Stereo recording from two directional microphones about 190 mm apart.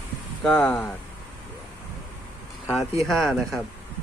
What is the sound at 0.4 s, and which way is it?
Speech, 5° left (ahead or behind).